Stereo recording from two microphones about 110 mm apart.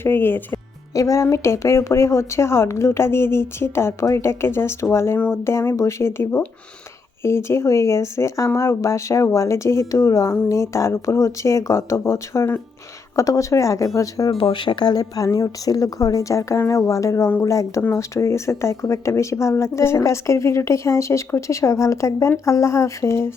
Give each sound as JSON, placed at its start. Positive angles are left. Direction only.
{"t": 0.0, "sound": "speech", "side_deg": 20}
{"t": 14.3, "sound": "speech", "side_deg": 45}